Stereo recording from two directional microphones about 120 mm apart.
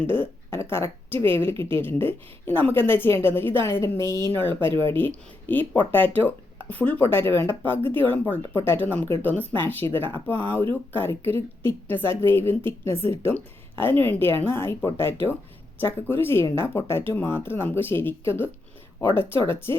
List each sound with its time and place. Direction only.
0.0 s a woman's voice: 20° left (ahead or behind)
4.0 s speech: 35° right (ahead or behind)
4.4 s a woman's voice: 15° left (ahead or behind)